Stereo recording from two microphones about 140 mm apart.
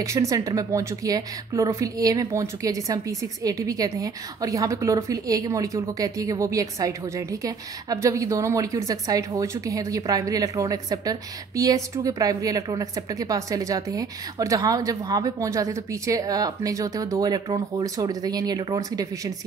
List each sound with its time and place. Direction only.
0.0 s a woman's voice: 25° right (ahead or behind)